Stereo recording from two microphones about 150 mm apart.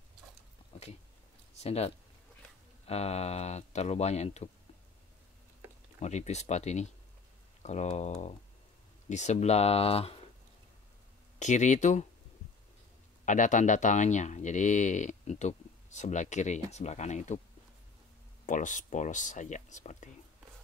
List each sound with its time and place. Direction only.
0.7 s a sound: 45° left (ahead or behind)
1.6 s speech: 45° left (ahead or behind)
5.9 s speech: 50° left (ahead or behind)
11.3 s speech: 55° left (ahead or behind)
13.2 s speech: 55° left (ahead or behind)
18.4 s speech: 60° left (ahead or behind)